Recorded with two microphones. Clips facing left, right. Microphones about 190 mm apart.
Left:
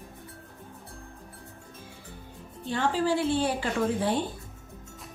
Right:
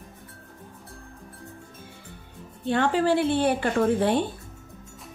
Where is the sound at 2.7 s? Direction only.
65° right (ahead or behind).